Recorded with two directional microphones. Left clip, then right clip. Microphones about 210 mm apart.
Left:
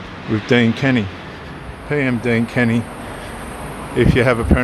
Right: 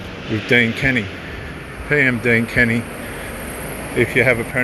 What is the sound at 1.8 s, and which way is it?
Speech, 10° left (ahead or behind).